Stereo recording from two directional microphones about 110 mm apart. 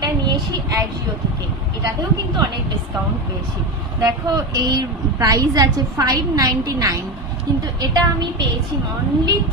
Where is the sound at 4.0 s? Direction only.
30° right (ahead or behind).